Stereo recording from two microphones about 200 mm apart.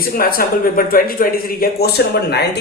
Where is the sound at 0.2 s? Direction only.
45° left (ahead or behind).